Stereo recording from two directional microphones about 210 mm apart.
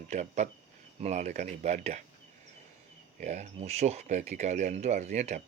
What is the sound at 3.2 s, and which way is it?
Speech, 35° right (ahead or behind).